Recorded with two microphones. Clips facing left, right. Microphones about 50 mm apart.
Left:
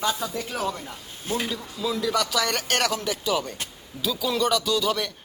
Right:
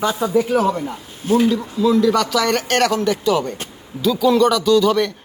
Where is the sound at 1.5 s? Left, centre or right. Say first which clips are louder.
Right 12 dB; centre.